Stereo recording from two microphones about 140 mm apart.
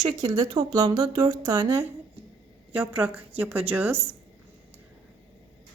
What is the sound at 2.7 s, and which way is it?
Speech, 10° right (ahead or behind).